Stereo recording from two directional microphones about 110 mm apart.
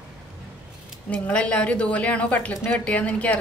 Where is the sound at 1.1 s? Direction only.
10° left (ahead or behind).